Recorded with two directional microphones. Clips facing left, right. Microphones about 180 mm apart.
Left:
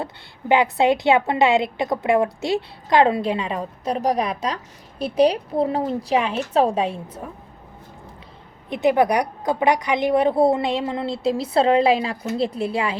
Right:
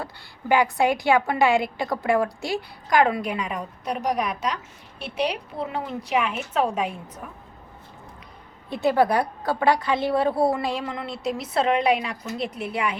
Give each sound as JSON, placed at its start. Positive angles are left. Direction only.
{"t": 0.0, "sound": "a woman's voice", "side_deg": 20}
{"t": 8.7, "sound": "a woman's voice", "side_deg": 20}